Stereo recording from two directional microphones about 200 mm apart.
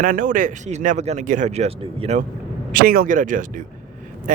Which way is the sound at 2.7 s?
45° right (ahead or behind).